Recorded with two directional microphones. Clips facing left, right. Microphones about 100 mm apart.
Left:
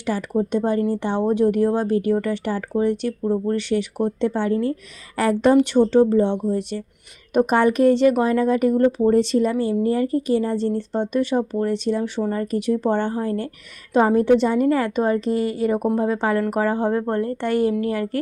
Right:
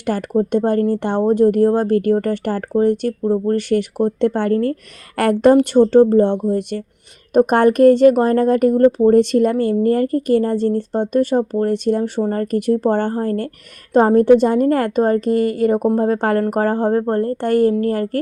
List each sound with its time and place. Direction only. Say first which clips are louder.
0.0 s speech: right 4 dB; 55° right (ahead or behind)